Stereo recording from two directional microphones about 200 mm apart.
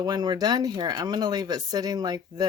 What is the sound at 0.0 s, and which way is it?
Speech, 20° right (ahead or behind).